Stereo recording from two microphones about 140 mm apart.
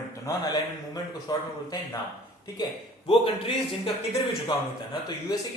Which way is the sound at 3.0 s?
40° left (ahead or behind).